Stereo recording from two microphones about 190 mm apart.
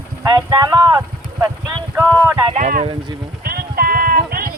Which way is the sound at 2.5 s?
40° right (ahead or behind).